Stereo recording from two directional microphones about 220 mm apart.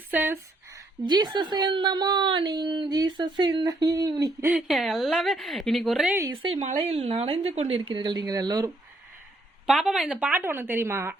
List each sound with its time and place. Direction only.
0.1 s speech: 10° right (ahead or behind)
1.0 s a woman's voice: 20° right (ahead or behind)
6.3 s a woman's voice: 25° right (ahead or behind)
9.6 s a woman's voice: centre (ahead or behind)